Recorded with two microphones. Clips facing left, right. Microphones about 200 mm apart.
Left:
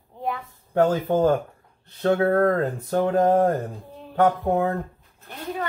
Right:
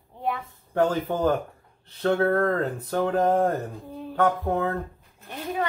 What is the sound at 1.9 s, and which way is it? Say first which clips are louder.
Speech: left 2 dB; 15° left (ahead or behind).